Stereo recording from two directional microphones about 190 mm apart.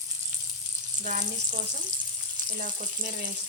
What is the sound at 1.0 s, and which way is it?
Speech, 40° right (ahead or behind).